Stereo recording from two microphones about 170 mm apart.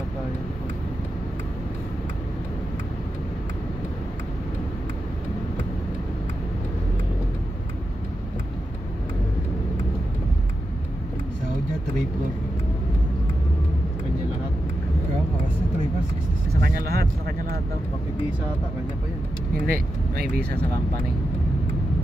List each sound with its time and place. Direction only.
16.6 s vehicle: 65° right (ahead or behind)
19.6 s vehicle: 60° right (ahead or behind)